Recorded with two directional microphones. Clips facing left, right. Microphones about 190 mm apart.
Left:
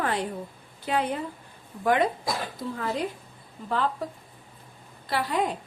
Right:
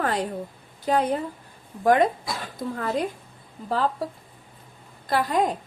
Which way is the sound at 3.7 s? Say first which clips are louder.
Right 3 dB; 35° right (ahead or behind).